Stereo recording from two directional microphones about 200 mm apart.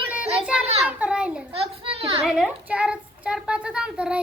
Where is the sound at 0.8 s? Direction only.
5° right (ahead or behind).